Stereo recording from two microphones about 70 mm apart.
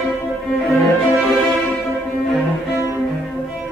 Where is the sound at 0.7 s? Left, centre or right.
Centre.